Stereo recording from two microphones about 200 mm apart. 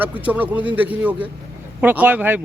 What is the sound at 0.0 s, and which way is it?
A man's voice, 10° right (ahead or behind).